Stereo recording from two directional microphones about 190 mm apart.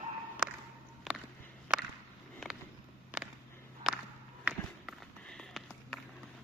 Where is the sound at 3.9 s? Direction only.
5° right (ahead or behind).